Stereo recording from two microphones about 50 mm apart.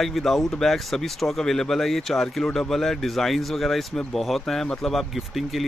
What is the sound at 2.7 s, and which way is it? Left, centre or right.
Speech, centre.